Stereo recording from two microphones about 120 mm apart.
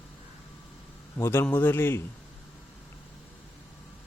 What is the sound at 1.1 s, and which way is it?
Speech, 20° left (ahead or behind).